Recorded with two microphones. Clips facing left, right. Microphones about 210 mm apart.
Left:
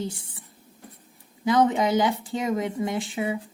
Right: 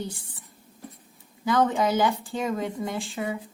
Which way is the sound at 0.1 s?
25° left (ahead or behind).